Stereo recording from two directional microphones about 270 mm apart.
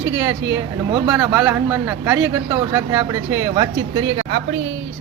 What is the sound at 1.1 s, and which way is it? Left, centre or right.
Speech, centre.